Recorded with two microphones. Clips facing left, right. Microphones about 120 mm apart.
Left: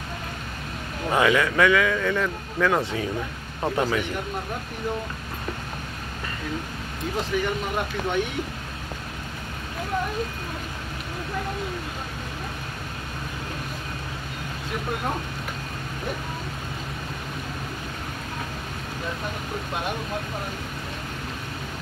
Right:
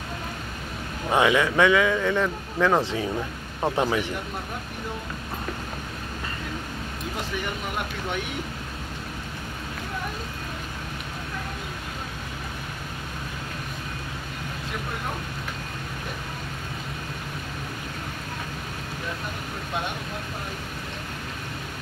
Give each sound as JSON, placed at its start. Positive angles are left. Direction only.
{"t": 1.1, "sound": "a man's voice", "side_deg": -20}